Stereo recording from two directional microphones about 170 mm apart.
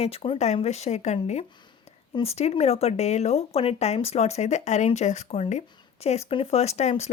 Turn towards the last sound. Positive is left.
turn(degrees=40)  # may be behind; listen again after turning